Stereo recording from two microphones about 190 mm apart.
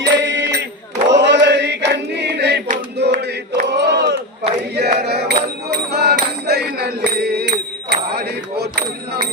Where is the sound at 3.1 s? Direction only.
55° right (ahead or behind).